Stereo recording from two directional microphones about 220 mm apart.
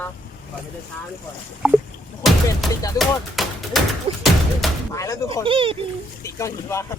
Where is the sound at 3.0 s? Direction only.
Centre (ahead or behind).